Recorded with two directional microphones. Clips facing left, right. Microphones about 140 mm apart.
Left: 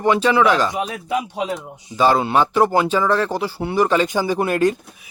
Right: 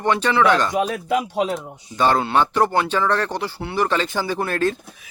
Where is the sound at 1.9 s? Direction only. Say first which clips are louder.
Left 2 dB; 5° left (ahead or behind).